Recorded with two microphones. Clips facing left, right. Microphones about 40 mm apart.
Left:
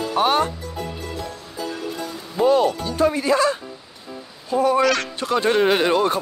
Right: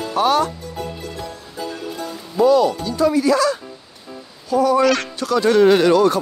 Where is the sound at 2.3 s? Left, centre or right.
Left.